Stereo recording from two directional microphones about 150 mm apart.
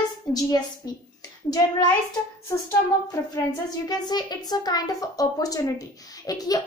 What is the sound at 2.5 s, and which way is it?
Speech, 20° left (ahead or behind).